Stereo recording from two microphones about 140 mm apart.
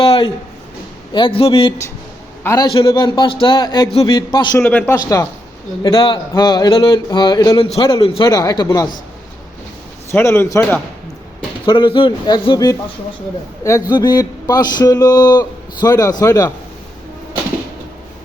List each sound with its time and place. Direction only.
0.0 s speech: 40° left (ahead or behind)
2.4 s a man's voice: 20° left (ahead or behind)
2.7 s speech: 35° left (ahead or behind)
4.6 s a man's voice: 15° left (ahead or behind)
5.8 s speech: 35° left (ahead or behind)
10.1 s a man's voice: 15° left (ahead or behind)
11.6 s speech: 35° left (ahead or behind)